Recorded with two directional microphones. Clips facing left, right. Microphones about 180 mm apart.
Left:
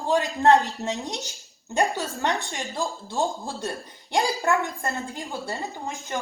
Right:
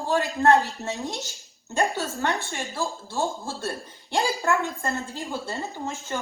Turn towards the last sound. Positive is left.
turn(degrees=15)  # may be behind; listen again after turning